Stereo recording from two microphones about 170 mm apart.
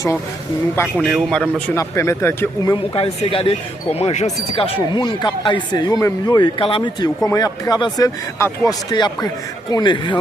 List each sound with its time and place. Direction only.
0.9 s a man's voice: centre (ahead or behind)
2.9 s speech: 35° left (ahead or behind)